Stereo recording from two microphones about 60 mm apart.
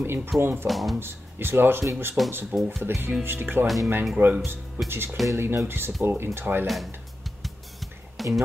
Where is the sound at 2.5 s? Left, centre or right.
Right.